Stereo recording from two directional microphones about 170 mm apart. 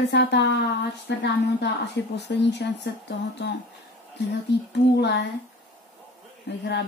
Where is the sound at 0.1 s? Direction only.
85° left.